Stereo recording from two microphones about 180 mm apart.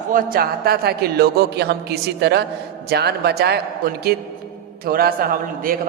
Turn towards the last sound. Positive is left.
turn(degrees=-55)  # may be behind; listen again after turning